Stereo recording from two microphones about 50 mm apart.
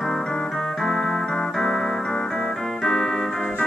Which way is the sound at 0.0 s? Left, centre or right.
Centre.